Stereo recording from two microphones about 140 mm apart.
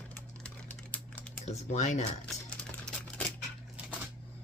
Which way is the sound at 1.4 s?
50° left (ahead or behind).